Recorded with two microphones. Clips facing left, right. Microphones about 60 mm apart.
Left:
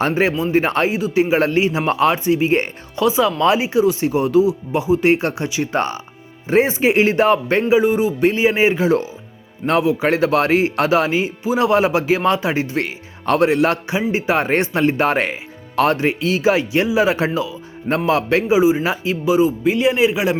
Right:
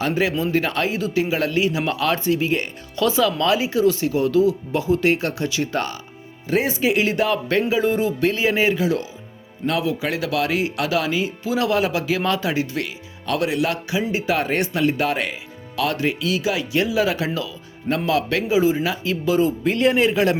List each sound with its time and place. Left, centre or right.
0.0 s speech: left
0.3 s speech: centre
0.6 s speech: left
0.9 s speech: centre
1.2 s speech: left
3.0 s speech: left
7.7 s speech: centre
8.2 s speech: left
9.6 s speech: centre
10.0 s speech: left
19.2 s speech: centre